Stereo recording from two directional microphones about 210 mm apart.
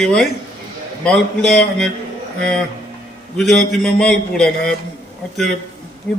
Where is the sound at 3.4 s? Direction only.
Centre (ahead or behind).